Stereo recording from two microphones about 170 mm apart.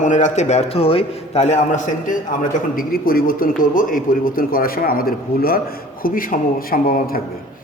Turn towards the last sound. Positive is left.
turn(degrees=55)  # may be behind; listen again after turning